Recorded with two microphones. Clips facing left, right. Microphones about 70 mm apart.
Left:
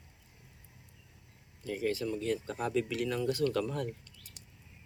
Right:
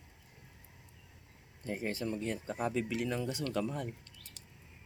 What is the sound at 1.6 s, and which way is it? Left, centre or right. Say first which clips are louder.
Speech: left 3 dB; right.